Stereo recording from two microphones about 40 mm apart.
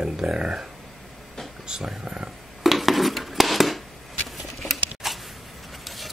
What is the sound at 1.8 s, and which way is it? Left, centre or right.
Speech, centre.